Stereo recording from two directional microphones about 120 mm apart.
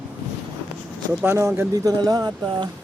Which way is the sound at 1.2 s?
20° right (ahead or behind).